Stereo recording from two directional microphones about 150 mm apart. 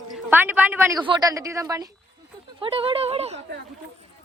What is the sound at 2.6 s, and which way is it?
Speech, 35° right (ahead or behind).